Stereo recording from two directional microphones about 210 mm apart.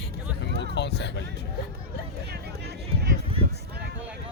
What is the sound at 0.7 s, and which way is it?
Speech, 55° left (ahead or behind).